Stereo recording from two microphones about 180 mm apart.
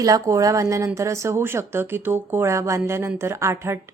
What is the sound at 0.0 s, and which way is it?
Speech, 20° right (ahead or behind).